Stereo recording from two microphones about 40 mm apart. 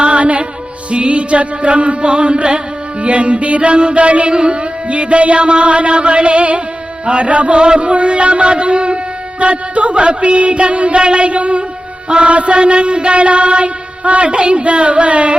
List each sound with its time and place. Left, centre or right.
0.0 s music: right